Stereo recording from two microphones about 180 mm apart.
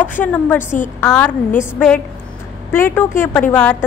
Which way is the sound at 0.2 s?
10° left (ahead or behind).